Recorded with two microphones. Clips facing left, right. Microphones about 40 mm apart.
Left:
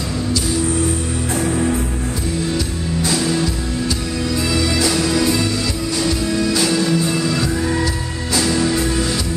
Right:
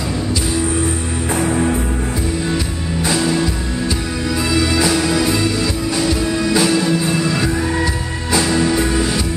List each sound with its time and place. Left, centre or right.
1.3 s music: right
4.5 s music: centre
6.4 s music: centre